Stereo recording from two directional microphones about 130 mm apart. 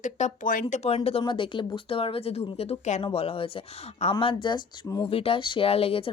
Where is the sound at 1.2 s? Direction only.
40° left (ahead or behind); by 3.0 s 55° left (ahead or behind).